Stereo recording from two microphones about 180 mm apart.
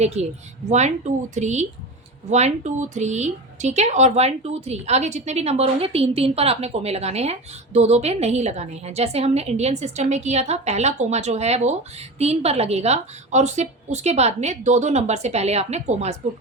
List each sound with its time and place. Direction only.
0.0 s speech: 35° right (ahead or behind)